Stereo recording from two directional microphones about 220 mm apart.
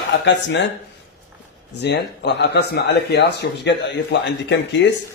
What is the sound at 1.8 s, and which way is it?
A man's voice, 50° left (ahead or behind).